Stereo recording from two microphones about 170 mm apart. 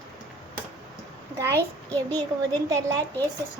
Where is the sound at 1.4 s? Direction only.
15° right (ahead or behind).